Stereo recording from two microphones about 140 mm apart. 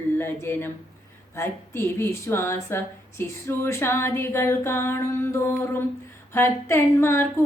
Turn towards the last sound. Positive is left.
turn(degrees=15)  # may be behind; listen again after turning